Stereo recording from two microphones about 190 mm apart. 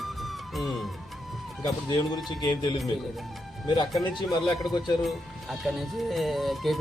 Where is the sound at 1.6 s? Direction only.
20° left (ahead or behind).